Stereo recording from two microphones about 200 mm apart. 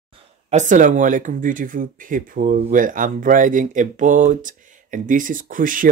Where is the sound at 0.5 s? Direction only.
40° right (ahead or behind).